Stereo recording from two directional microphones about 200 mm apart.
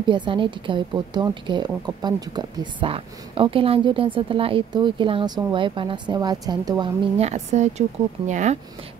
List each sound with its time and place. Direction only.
0.0 s a woman's voice: 25° right (ahead or behind)
7.2 s speech: 35° right (ahead or behind)